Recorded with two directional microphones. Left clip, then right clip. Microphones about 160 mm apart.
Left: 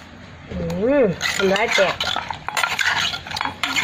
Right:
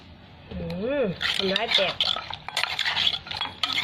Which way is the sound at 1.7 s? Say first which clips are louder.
Left 4 dB; centre (ahead or behind).